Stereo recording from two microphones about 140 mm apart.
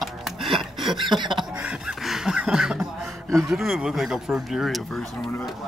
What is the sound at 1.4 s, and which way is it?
Speech, 5° right (ahead or behind).